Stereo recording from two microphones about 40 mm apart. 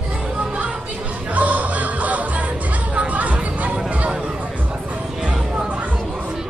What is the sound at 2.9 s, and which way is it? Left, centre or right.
Chatter, right.